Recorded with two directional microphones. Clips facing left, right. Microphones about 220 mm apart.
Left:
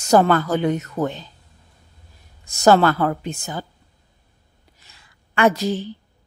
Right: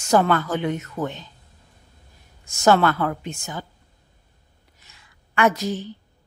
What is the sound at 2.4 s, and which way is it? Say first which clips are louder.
A woman's voice: left 3 dB; 35° left (ahead or behind).